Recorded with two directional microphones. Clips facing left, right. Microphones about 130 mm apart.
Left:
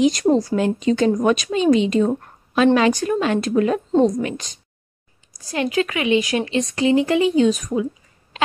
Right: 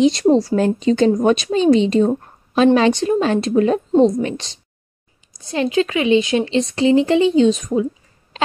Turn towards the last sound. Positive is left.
turn(degrees=-25)  # may be behind; listen again after turning